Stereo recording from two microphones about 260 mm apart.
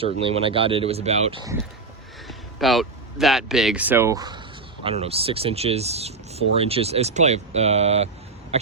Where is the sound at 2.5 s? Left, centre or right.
Centre.